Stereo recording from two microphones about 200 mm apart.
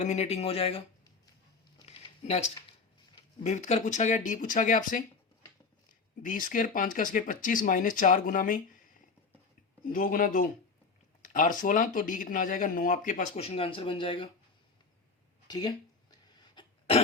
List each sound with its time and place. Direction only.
0.0 s speech: 35° left (ahead or behind)
1.9 s a sound: 25° left (ahead or behind)
3.4 s speech: 35° left (ahead or behind)
6.2 s speech: 45° left (ahead or behind)
9.8 s speech: 45° left (ahead or behind); by 14.3 s 25° left (ahead or behind)
15.4 s speech: 20° left (ahead or behind)
16.6 s cough: 30° left (ahead or behind)